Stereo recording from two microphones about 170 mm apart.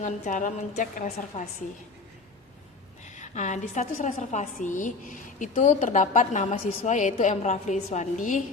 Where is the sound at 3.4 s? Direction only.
45° left (ahead or behind).